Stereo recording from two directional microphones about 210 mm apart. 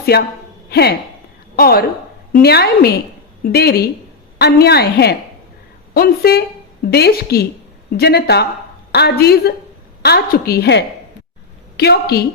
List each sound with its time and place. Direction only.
0.0 s a woman's voice: 50° left (ahead or behind)